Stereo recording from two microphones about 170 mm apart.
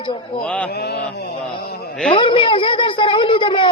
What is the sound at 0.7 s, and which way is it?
Mantra, 70° left (ahead or behind).